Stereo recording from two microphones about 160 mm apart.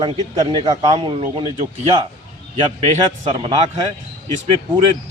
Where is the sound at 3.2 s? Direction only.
40° right (ahead or behind).